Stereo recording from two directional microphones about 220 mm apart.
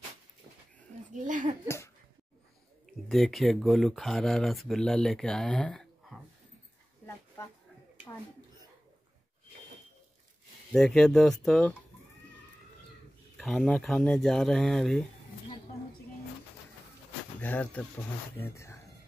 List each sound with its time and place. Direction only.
1.1 s speech: 35° right (ahead or behind)
2.9 s speech: centre (ahead or behind)
10.7 s speech: centre (ahead or behind)
13.4 s speech: centre (ahead or behind)
17.4 s speech: 5° left (ahead or behind)